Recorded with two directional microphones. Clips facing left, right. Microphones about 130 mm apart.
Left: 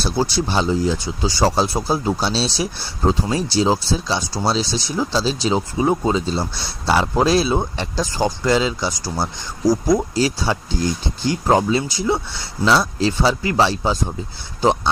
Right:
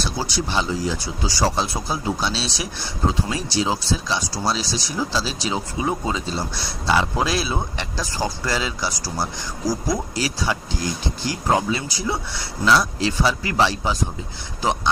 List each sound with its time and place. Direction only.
0.0 s speech: 30° left (ahead or behind)
10.2 s speech: 30° left (ahead or behind)